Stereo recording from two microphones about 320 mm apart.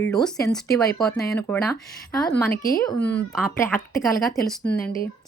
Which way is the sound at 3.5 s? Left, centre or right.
Centre.